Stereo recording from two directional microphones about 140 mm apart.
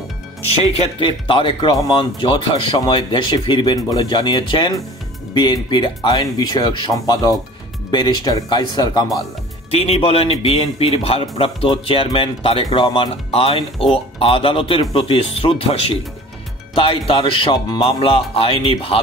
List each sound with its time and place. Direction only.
0.5 s speech: 45° left (ahead or behind)
9.7 s speech: 45° left (ahead or behind)